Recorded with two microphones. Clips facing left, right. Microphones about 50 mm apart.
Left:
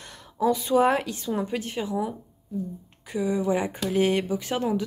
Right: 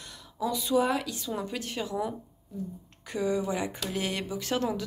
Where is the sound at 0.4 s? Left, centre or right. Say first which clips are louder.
Left 5 dB; left.